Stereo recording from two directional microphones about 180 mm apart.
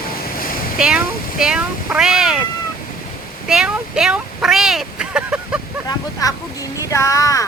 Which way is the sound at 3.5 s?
5° right (ahead or behind).